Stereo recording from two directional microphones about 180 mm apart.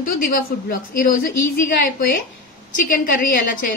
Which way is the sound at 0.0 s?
50° left (ahead or behind).